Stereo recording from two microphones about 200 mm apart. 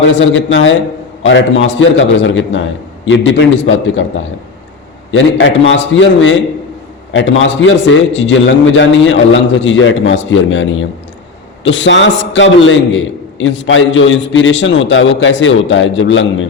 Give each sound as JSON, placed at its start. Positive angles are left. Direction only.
{"t": 0.1, "sound": "a man's voice", "side_deg": 65}
{"t": 5.1, "sound": "a man's voice", "side_deg": 70}